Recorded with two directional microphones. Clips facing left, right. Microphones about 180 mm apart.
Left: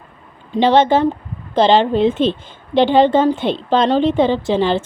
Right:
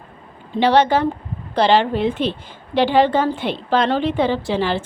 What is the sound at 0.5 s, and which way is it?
A woman's voice, 20° left (ahead or behind).